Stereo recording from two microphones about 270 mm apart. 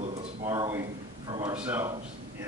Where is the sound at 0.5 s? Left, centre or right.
Centre.